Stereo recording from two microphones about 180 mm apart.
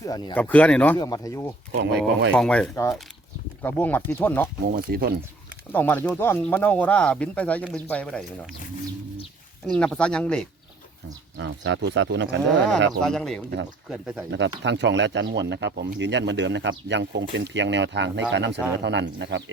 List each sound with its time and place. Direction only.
0.0 s speech: 20° left (ahead or behind)
0.3 s speech: 10° left (ahead or behind)
0.9 s speech: 20° left (ahead or behind)
1.7 s speech: 80° right
2.3 s speech: 5° left (ahead or behind)
4.6 s speech: 55° right (ahead or behind)
5.7 s speech: 10° left (ahead or behind)
9.6 s speech: 5° left (ahead or behind)
11.3 s speech: 80° right
13.1 s speech: 5° left (ahead or behind)
14.3 s speech: 80° right